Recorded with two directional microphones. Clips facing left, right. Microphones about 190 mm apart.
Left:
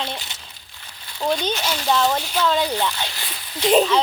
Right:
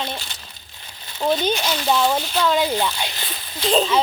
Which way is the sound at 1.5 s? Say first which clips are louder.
Right 2 dB; 5° left (ahead or behind).